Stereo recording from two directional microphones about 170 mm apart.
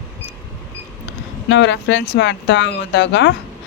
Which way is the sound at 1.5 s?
90° left.